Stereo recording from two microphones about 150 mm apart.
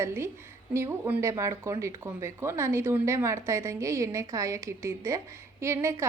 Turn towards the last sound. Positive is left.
turn(degrees=-20)  # may be behind; listen again after turning